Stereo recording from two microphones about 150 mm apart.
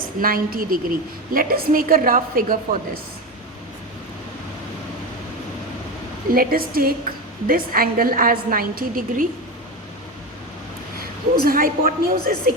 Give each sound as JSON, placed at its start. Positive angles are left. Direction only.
{"t": 0.0, "sound": "a woman's voice", "side_deg": -70}
{"t": 6.3, "sound": "a woman's voice", "side_deg": -75}
{"t": 11.3, "sound": "a woman's voice", "side_deg": -75}